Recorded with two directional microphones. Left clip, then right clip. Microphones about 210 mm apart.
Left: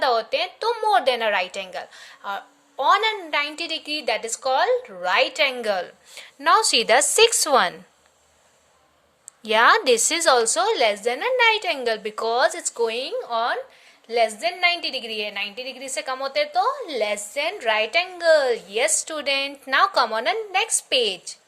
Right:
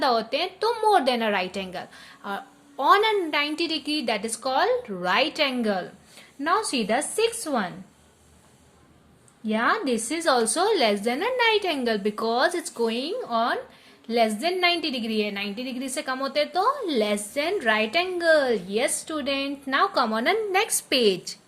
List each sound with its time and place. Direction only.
0.0 s a woman's voice: 15° left (ahead or behind); by 7.7 s 45° left (ahead or behind)
9.4 s a woman's voice: 45° left (ahead or behind); by 21.3 s 15° left (ahead or behind)